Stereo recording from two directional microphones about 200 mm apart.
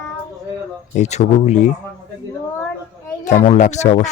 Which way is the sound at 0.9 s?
35° left (ahead or behind).